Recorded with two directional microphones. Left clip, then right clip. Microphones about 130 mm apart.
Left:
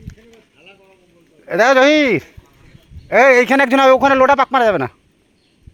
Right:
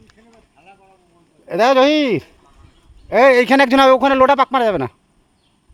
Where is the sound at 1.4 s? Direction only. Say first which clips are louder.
Left 2 dB; 35° right (ahead or behind).